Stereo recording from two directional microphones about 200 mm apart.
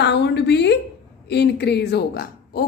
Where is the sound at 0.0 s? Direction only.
60° left (ahead or behind).